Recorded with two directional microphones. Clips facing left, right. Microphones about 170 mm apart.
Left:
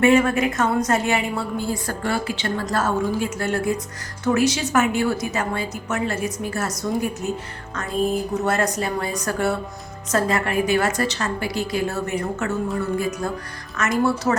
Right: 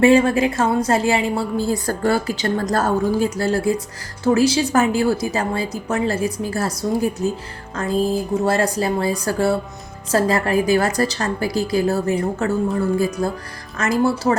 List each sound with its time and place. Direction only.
0.0 s a woman's voice: 30° right (ahead or behind)